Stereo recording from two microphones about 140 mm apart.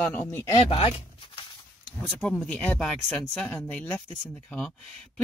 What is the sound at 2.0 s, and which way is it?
Speech, 5° left (ahead or behind).